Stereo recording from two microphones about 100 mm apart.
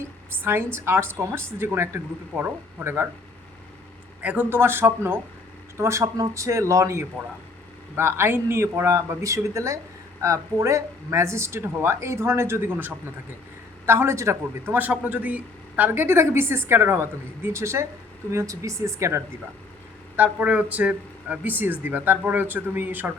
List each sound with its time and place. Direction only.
0.4 s speech: 25° right (ahead or behind)
4.2 s speech: 15° right (ahead or behind)
20.1 s speech: 15° right (ahead or behind)